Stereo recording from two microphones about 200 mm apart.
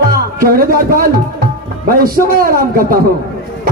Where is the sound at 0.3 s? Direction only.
45° right (ahead or behind).